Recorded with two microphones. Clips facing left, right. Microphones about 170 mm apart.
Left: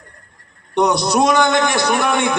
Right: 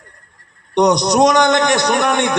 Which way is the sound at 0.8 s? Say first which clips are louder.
Right 3 dB; 20° right (ahead or behind).